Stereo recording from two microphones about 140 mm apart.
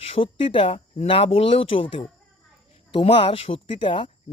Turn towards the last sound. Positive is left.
turn(degrees=35)  # may be behind; listen again after turning